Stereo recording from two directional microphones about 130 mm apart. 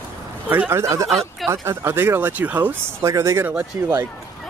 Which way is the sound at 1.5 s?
20° right (ahead or behind).